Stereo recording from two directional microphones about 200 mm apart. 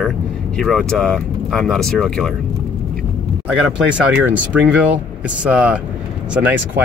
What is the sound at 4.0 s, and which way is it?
Speech, 5° right (ahead or behind).